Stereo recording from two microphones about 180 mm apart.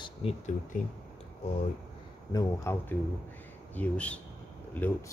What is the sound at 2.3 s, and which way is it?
Speech, 15° left (ahead or behind).